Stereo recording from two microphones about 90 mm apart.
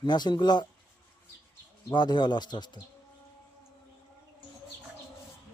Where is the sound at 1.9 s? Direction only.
55° left (ahead or behind).